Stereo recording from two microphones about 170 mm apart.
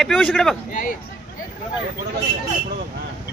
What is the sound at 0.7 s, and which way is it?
Speech, 50° left (ahead or behind).